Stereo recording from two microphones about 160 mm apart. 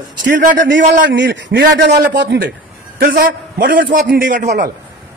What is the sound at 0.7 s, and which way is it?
A man's voice, 90° right.